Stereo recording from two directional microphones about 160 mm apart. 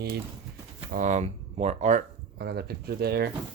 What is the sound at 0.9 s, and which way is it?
Speech, 50° right (ahead or behind).